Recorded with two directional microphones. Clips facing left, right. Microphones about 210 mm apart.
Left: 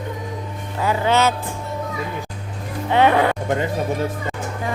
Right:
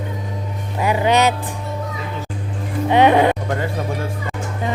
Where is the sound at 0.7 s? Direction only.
15° right (ahead or behind).